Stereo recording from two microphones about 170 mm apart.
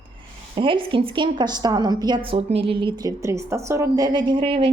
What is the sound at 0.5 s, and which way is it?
A woman's voice, 30° right (ahead or behind).